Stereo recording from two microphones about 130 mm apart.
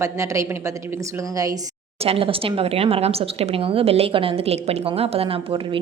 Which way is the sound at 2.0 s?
50° right (ahead or behind).